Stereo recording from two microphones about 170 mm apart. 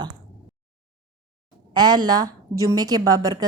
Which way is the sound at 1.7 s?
25° right (ahead or behind).